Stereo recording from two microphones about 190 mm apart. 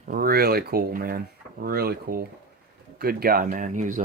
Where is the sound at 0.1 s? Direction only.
50° right (ahead or behind).